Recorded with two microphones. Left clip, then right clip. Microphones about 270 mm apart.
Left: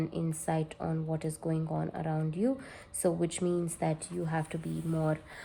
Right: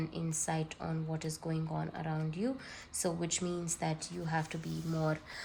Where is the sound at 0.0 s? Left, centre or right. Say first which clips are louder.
Left 4 dB; centre.